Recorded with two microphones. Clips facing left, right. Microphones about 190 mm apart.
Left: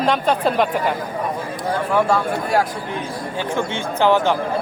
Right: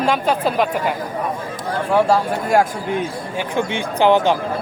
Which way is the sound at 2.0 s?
40° right (ahead or behind).